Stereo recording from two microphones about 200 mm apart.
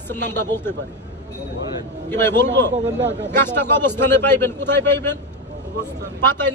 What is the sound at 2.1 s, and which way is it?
Speech, 10° left (ahead or behind).